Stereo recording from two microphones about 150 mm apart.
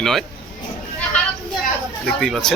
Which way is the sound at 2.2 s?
5° left (ahead or behind).